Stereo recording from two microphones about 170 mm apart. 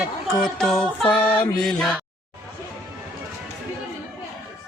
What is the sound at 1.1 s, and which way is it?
Mantra, 10° left (ahead or behind).